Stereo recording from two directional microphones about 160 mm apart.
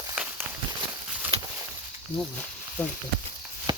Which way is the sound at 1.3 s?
40° right (ahead or behind).